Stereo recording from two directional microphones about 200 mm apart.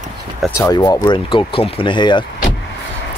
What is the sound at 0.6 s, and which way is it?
Speech, 15° left (ahead or behind).